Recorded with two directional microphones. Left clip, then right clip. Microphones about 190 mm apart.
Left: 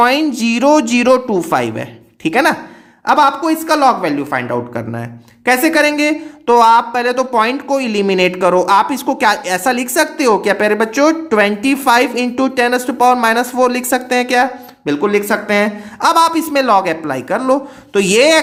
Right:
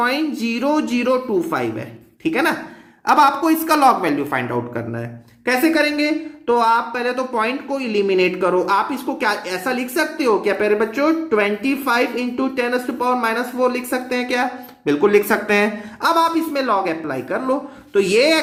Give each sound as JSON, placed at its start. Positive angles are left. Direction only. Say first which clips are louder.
{"t": 0.0, "sound": "speech", "louder": "left 7 dB", "side_deg": 40}
{"t": 3.1, "sound": "a woman's voice", "louder": "left 3 dB", "side_deg": 20}
{"t": 5.5, "sound": "speech", "louder": "left 5 dB", "side_deg": 45}
{"t": 14.8, "sound": "a woman's voice", "louder": "left 1 dB", "side_deg": 15}
{"t": 16.0, "sound": "speech", "louder": "left 5 dB", "side_deg": 45}